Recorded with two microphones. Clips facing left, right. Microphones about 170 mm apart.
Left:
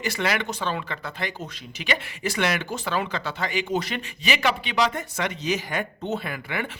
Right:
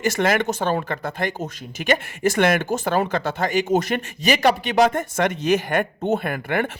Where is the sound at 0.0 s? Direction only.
45° right (ahead or behind).